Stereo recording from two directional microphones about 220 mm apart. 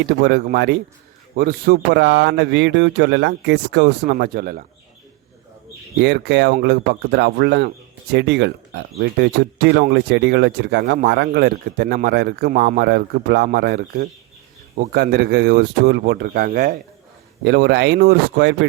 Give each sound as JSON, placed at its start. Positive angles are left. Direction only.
{"t": 0.0, "sound": "speech", "side_deg": -50}
{"t": 6.0, "sound": "speech", "side_deg": -50}